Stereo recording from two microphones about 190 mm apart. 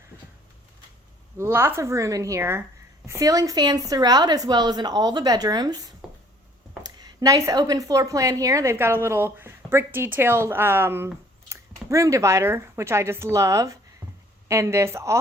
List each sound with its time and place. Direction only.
1.4 s a woman's voice: 10° right (ahead or behind)
6.8 s a woman's voice: 20° right (ahead or behind)